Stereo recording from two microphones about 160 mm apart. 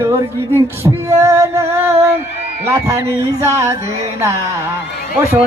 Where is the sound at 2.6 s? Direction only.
15° right (ahead or behind).